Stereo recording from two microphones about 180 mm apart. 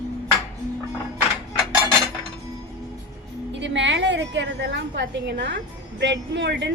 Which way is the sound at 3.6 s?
80° right.